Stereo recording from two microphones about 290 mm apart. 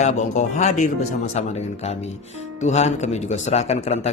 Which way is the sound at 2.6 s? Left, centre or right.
Left.